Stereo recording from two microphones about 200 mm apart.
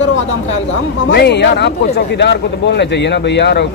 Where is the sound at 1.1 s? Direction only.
55° left (ahead or behind).